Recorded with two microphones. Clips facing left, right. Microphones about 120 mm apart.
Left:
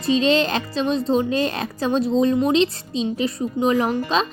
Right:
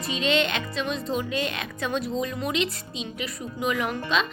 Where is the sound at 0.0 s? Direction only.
35° left (ahead or behind).